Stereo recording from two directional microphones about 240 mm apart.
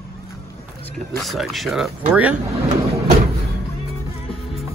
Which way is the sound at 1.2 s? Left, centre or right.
Centre.